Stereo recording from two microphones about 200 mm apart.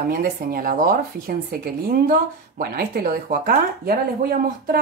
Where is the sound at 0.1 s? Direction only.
45° right (ahead or behind).